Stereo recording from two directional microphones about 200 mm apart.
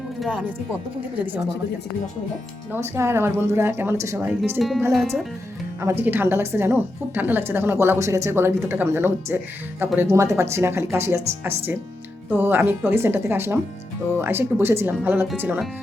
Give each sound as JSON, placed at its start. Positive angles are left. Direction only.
{"t": 0.2, "sound": "speech", "side_deg": -5}
{"t": 2.7, "sound": "speech", "side_deg": -10}
{"t": 4.9, "sound": "speech", "side_deg": 0}
{"t": 5.8, "sound": "speech", "side_deg": -10}